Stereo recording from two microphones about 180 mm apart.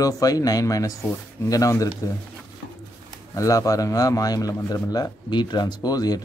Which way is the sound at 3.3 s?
20° left (ahead or behind).